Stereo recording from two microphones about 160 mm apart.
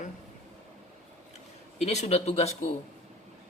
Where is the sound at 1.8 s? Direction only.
40° left (ahead or behind).